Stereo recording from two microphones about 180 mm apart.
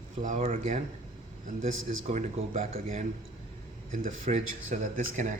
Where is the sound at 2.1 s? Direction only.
40° right (ahead or behind).